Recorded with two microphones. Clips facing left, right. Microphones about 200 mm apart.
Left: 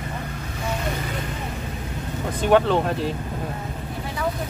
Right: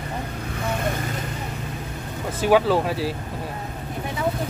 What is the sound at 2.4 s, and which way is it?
Speech, 5° right (ahead or behind).